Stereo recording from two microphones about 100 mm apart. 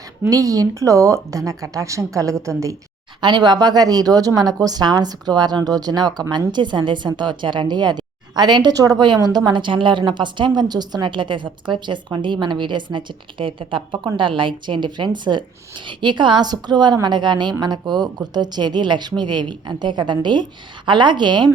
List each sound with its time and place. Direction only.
0.3 s speech: 35° right (ahead or behind)
3.2 s a woman's voice: 50° right (ahead or behind)